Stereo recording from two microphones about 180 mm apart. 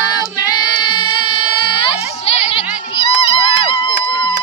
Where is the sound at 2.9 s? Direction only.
30° left (ahead or behind).